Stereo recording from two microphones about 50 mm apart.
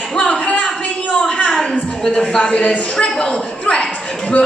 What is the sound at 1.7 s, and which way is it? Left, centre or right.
A man's voice, left.